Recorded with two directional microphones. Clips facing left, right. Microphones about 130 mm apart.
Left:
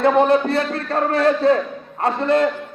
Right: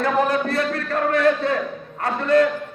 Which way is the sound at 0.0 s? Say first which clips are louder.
Left 5 dB; 25° left (ahead or behind).